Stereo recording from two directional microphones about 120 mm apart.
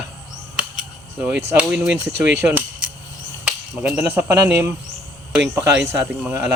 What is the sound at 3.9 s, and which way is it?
Speech, 15° right (ahead or behind).